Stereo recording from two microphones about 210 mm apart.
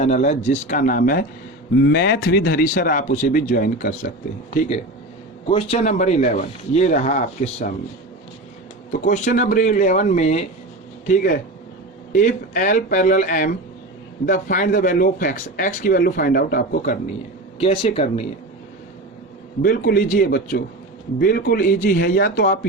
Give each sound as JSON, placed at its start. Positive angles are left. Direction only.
{"t": 0.0, "sound": "speech", "side_deg": 35}
{"t": 1.8, "sound": "speech", "side_deg": 55}
{"t": 5.5, "sound": "speech", "side_deg": 25}
{"t": 8.9, "sound": "speech", "side_deg": 35}
{"t": 17.6, "sound": "speech", "side_deg": 30}
{"t": 19.6, "sound": "speech", "side_deg": 45}